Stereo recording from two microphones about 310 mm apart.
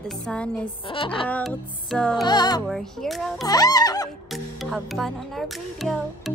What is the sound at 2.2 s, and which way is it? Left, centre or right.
Speech, centre.